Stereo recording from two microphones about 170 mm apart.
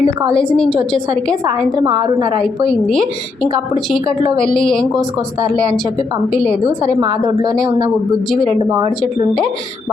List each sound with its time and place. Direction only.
0.0 s a woman's voice: 20° right (ahead or behind)
0.3 s a woman's voice: 5° left (ahead or behind)
1.7 s a woman's voice: 25° right (ahead or behind)
2.4 s a woman's voice: 5° left (ahead or behind)
4.4 s a woman's voice: 5° left (ahead or behind)
7.0 s a woman's voice: 30° right (ahead or behind)